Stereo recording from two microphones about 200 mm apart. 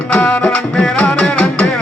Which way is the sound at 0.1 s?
5° left (ahead or behind).